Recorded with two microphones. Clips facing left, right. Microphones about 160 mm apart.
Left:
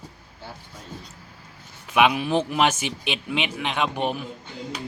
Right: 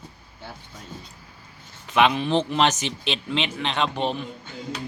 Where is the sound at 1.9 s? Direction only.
10° left (ahead or behind).